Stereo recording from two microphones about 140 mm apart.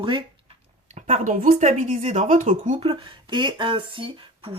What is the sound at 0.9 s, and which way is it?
Speech, 60° right (ahead or behind).